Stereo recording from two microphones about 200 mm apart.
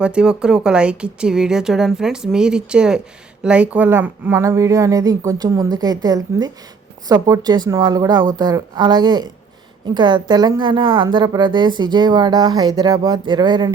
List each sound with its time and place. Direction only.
0.0 s a woman's voice: 5° right (ahead or behind); by 13.7 s 20° right (ahead or behind)